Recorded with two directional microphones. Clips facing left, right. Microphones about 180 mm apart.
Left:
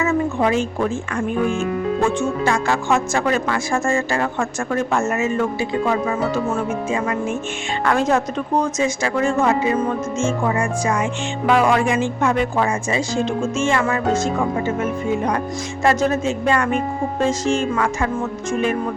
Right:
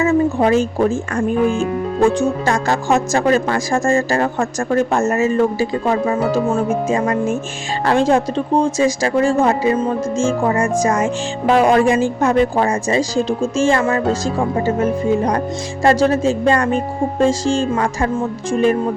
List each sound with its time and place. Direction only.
0.0 s speech: 35° right (ahead or behind)